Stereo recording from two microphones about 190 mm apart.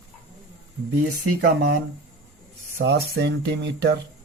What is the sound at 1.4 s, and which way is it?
Speech, 60° right (ahead or behind).